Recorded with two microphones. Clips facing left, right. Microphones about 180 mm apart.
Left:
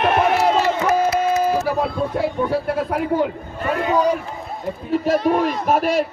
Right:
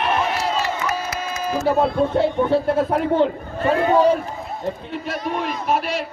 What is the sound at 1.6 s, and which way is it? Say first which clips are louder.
Speech: right 3 dB; 25° right (ahead or behind).